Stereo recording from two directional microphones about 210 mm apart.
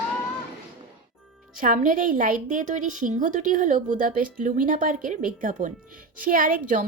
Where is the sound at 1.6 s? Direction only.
40° right (ahead or behind).